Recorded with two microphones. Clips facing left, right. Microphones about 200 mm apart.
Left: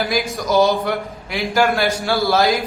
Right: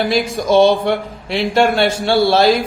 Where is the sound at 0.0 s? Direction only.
30° right (ahead or behind).